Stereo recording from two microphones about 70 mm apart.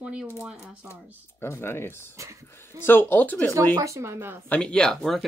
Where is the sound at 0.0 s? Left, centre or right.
Centre.